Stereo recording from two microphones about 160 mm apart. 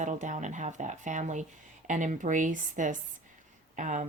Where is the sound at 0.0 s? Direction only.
50° right (ahead or behind).